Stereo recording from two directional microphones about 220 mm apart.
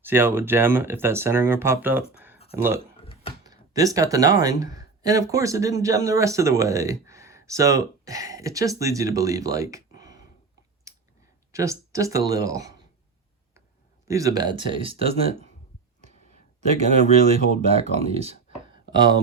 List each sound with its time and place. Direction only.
0.0 s speech: 10° right (ahead or behind)
3.0 s a sound: 25° left (ahead or behind)
3.4 s speech: 15° right (ahead or behind)
10.9 s clicking: 15° right (ahead or behind)
11.5 s speech: 15° right (ahead or behind)
14.1 s speech: 15° right (ahead or behind)
16.6 s speech: 30° right (ahead or behind)